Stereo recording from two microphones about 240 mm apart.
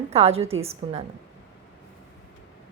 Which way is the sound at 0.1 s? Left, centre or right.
Right.